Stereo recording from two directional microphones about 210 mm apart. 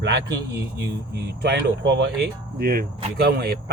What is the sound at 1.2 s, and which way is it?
Speech, 50° right (ahead or behind).